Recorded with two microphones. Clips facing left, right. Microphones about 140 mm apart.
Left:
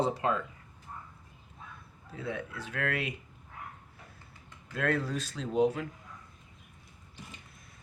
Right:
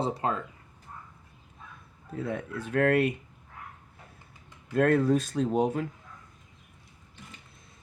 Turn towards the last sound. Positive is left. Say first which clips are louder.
# right 2 dB
turn(degrees=-45)  # may be behind; listen again after turning